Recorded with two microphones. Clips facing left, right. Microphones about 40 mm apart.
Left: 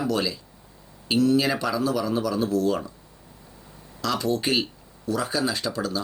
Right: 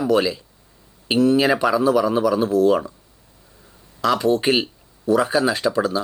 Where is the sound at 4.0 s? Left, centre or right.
Right.